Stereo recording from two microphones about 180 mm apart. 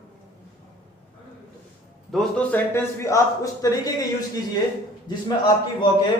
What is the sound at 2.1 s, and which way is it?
A man's voice, 10° left (ahead or behind).